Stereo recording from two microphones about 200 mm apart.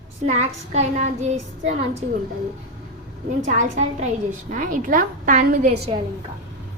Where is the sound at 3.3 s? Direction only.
40° right (ahead or behind).